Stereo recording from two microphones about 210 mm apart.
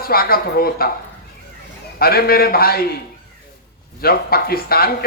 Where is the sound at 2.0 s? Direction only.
45° left (ahead or behind).